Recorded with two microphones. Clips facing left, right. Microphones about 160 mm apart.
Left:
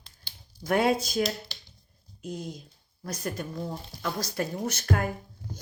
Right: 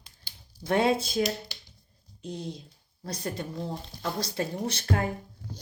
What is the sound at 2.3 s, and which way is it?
Speech, 25° right (ahead or behind).